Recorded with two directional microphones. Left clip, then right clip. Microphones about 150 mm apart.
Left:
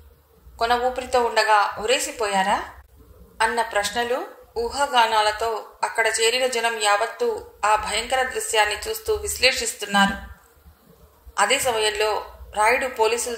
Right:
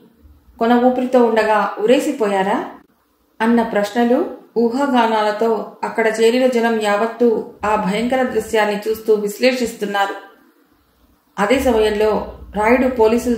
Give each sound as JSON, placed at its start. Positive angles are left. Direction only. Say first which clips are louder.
{"t": 0.6, "sound": "a woman's voice", "louder": "right 7 dB", "side_deg": 40}
{"t": 11.3, "sound": "a woman's voice", "louder": "right 5 dB", "side_deg": 40}